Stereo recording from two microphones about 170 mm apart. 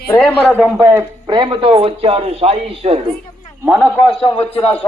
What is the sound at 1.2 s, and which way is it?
A man's voice, 25° right (ahead or behind).